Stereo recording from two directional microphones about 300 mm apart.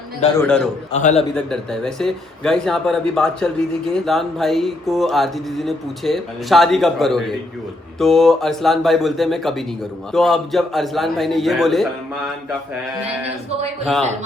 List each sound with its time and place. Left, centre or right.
0.3 s speech: centre
0.9 s a man's voice: left
1.5 s speech: centre